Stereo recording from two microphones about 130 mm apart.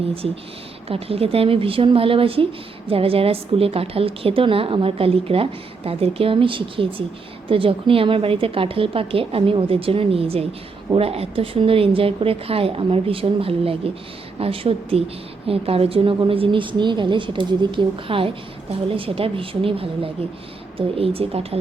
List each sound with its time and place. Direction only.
0.9 s a woman's voice: 50° right (ahead or behind)